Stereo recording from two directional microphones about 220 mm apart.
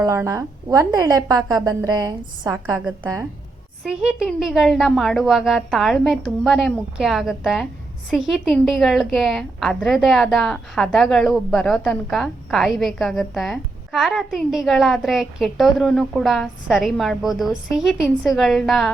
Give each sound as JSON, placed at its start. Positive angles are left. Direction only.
{"t": 0.0, "sound": "a woman's voice", "side_deg": -15}